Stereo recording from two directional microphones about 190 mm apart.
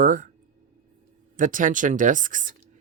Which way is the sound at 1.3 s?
45° right (ahead or behind).